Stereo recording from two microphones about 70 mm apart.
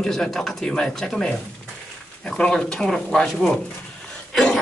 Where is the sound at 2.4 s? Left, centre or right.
Centre.